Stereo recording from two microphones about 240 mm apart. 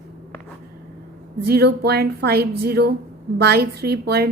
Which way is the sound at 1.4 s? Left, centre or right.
Right.